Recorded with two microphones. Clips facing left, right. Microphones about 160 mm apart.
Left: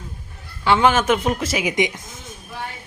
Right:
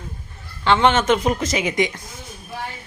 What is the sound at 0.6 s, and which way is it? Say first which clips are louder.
A man's voice: even; 5° left (ahead or behind).